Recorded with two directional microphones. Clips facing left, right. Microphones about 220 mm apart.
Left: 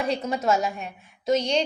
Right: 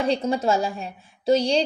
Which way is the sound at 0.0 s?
30° right (ahead or behind).